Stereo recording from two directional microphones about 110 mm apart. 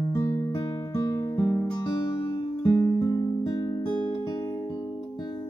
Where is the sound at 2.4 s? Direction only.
45° left (ahead or behind).